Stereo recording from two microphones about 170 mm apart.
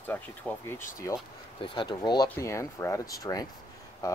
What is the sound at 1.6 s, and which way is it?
Speech, 25° left (ahead or behind).